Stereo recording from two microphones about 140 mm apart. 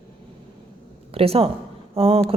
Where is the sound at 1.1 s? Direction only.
45° right (ahead or behind).